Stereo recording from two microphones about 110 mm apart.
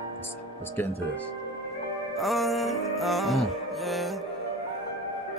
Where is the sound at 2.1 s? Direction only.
Centre (ahead or behind).